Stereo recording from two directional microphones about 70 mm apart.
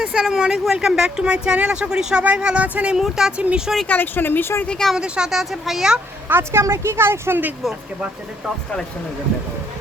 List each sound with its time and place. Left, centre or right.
0.0 s speech: centre
3.8 s speech: left
4.6 s a woman's voice: centre
4.9 s speech: centre
6.2 s speech: right
6.6 s speech: right